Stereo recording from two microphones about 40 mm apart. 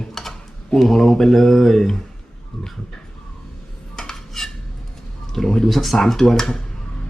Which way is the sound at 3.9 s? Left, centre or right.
Centre.